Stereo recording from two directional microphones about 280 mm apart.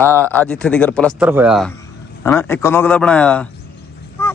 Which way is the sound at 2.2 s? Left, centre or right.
Centre.